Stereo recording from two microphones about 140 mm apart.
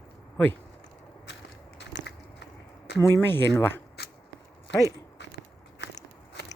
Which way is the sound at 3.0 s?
15° left (ahead or behind).